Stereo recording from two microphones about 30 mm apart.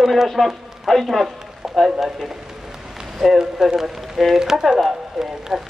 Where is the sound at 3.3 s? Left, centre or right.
Centre.